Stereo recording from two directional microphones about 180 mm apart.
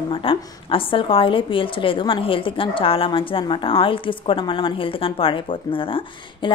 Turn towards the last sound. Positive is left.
turn(degrees=30)  # may be behind; listen again after turning